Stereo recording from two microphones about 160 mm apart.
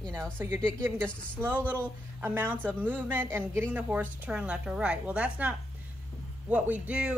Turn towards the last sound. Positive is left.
turn(degrees=-10)  # may be behind; listen again after turning